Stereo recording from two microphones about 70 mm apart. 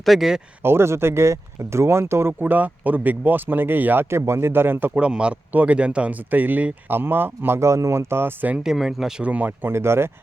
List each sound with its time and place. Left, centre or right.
0.0 s speech: centre
0.6 s speech: right
4.9 s speech: centre
8.5 s speech: centre
9.2 s speech: right
9.6 s speech: right